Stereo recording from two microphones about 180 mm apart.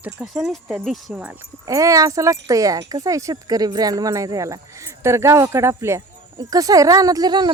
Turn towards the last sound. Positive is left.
turn(degrees=-25)  # may be behind; listen again after turning